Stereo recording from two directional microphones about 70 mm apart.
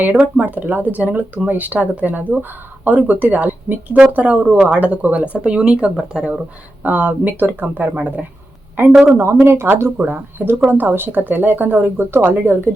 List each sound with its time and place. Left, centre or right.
0.0 s speech: centre
6.8 s speech: right